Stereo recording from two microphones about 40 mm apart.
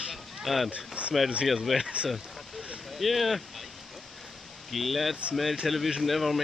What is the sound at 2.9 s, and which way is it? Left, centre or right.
Speech, centre.